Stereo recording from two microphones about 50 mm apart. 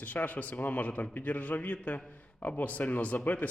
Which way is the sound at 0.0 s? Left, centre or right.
Left.